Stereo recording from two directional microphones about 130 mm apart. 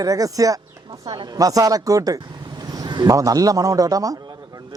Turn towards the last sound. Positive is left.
turn(degrees=-25)  # may be behind; listen again after turning